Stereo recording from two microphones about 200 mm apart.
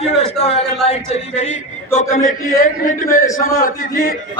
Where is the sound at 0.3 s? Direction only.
30° left (ahead or behind).